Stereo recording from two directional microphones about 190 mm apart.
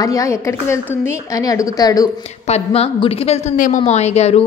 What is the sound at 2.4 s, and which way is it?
A woman's voice, 35° left (ahead or behind).